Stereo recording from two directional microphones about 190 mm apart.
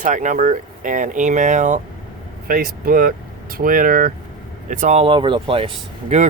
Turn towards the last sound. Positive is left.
turn(degrees=-30)  # may be behind; listen again after turning